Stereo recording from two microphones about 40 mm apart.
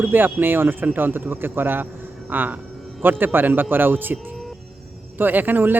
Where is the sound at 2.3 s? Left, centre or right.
Right.